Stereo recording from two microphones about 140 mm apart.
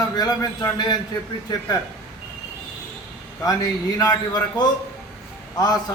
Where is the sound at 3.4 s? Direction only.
25° left (ahead or behind).